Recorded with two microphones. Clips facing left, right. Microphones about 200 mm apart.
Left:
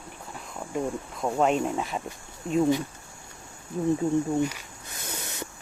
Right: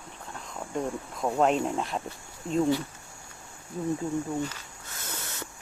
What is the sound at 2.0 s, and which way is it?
Speech, 15° left (ahead or behind).